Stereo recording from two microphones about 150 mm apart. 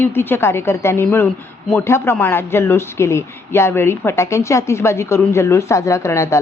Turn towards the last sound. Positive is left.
turn(degrees=20)  # may be behind; listen again after turning